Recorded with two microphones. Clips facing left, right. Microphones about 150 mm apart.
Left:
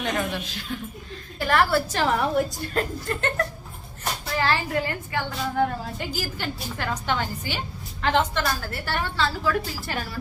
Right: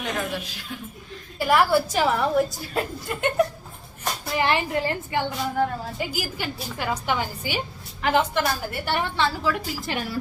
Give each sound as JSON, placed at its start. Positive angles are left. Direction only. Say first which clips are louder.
{"t": 0.0, "sound": "a woman's voice", "louder": "left 1 dB", "side_deg": -5}
{"t": 2.1, "sound": "a woman's voice", "louder": "right 1 dB", "side_deg": 0}
{"t": 5.5, "sound": "a woman's voice", "louder": "left 2 dB", "side_deg": 0}